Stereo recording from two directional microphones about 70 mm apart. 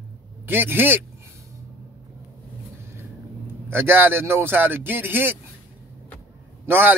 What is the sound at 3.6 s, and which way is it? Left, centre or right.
Speech, right.